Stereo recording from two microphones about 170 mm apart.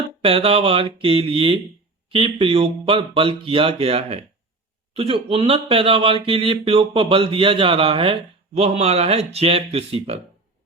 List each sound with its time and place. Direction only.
0.2 s speech: 35° right (ahead or behind)